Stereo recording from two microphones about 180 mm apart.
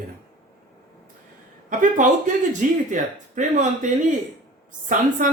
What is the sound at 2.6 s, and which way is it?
Speech, 45° right (ahead or behind).